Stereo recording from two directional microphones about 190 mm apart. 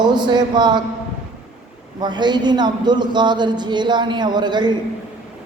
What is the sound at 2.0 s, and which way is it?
A man's voice, 25° right (ahead or behind).